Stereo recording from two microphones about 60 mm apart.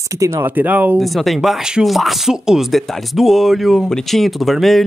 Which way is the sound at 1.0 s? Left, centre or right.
Centre.